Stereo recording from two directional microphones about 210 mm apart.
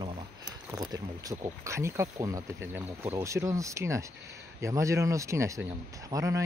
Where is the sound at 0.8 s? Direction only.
15° right (ahead or behind).